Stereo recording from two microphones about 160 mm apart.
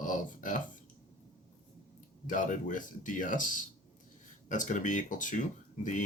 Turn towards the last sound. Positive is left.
turn(degrees=50)  # may be behind; listen again after turning